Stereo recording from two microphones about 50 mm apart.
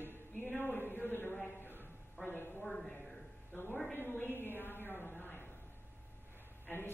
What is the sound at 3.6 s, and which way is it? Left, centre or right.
A woman's voice, left.